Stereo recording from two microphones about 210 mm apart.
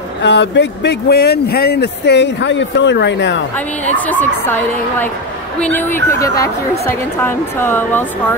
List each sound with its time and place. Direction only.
0.2 s speech: 55° left (ahead or behind)
3.9 s a woman's voice: 10° left (ahead or behind)
5.6 s a woman's voice: 10° left (ahead or behind)